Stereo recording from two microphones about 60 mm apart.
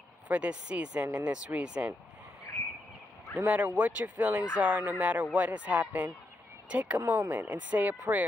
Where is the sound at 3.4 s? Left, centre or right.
Right.